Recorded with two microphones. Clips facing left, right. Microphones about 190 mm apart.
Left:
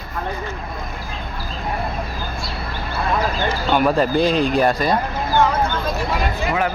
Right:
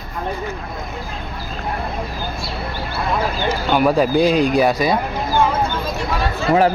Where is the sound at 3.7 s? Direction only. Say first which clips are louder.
Right 2 dB; 10° right (ahead or behind).